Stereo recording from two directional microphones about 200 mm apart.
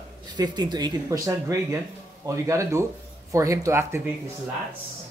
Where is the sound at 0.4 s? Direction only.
20° right (ahead or behind).